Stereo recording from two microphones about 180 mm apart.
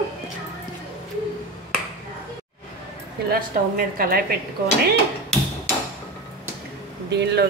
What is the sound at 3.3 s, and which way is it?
Speech, 55° right (ahead or behind).